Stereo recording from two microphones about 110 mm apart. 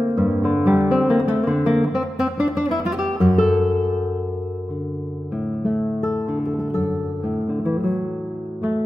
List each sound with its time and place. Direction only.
0.1 s guitar: 5° right (ahead or behind)
3.2 s music: centre (ahead or behind)
5.6 s music: centre (ahead or behind)